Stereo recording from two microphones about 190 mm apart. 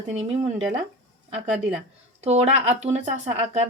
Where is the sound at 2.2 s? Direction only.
35° right (ahead or behind).